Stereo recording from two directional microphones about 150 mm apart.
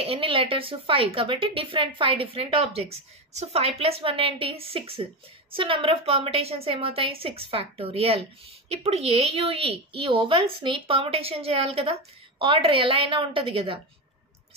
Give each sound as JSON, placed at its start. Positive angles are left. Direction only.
{"t": 0.0, "sound": "a woman's voice", "side_deg": -40}